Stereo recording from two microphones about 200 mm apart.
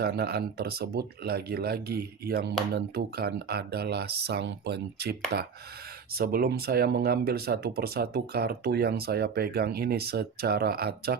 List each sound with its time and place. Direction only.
0.0 s speech: 55° right (ahead or behind)